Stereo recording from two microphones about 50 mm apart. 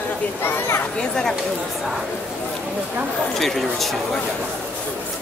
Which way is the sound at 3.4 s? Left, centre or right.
Centre.